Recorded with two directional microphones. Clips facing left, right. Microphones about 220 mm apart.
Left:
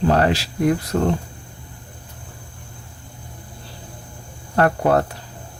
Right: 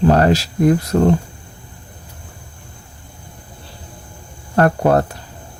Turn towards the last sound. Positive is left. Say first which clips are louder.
# right 3 dB
turn(degrees=-40)  # may be behind; listen again after turning